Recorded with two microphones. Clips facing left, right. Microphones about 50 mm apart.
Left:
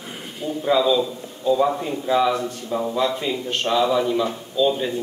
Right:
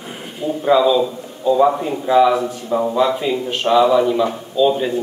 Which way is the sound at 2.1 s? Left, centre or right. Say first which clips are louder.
Right 6 dB; centre.